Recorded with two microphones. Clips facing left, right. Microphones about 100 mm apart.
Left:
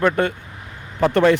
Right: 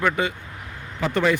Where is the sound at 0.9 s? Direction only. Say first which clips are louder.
Left 6 dB; 60° left (ahead or behind).